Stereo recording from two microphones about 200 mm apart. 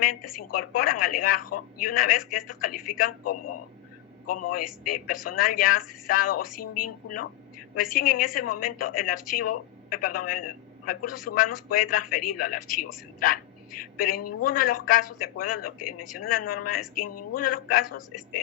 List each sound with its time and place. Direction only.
0.0 s a man's voice: 45° left (ahead or behind)
4.9 s a man's voice: 45° left (ahead or behind)